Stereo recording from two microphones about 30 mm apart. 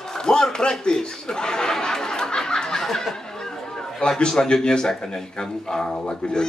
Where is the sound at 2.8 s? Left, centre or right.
Centre.